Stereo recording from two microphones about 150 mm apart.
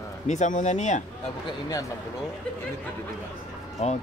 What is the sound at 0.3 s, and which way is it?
Speech, 55° left (ahead or behind).